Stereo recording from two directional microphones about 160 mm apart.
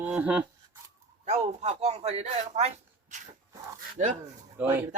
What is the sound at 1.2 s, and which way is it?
A man's voice, 45° right (ahead or behind).